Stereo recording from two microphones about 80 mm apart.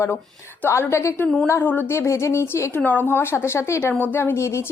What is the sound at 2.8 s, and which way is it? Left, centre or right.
A woman's voice, left.